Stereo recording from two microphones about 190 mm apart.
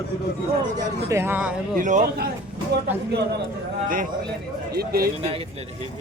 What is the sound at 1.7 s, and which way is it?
Speech, 45° right (ahead or behind).